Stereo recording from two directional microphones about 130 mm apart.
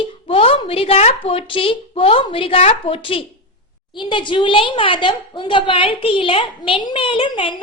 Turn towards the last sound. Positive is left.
turn(degrees=40)  # may be behind; listen again after turning